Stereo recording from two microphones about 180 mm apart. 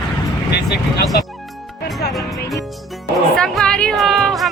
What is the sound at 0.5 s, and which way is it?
Vehicle, 65° left (ahead or behind).